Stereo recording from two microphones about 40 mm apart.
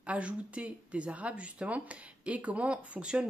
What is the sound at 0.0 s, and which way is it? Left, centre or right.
Speech, right.